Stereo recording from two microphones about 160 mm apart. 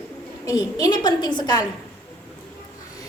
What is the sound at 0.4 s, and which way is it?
A woman's voice, 20° left (ahead or behind).